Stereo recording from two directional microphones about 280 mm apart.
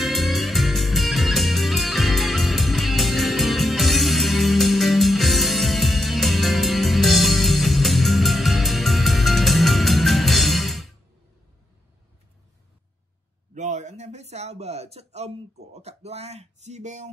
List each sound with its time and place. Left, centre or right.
0.0 s music: centre
13.6 s a sound: right
15.7 s speech: right